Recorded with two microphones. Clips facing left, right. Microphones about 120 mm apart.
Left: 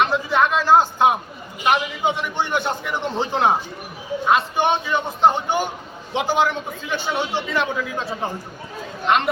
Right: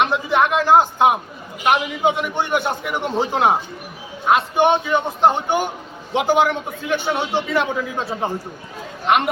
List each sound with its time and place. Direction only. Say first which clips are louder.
0.0 s a man's voice: right 1 dB; 15° right (ahead or behind)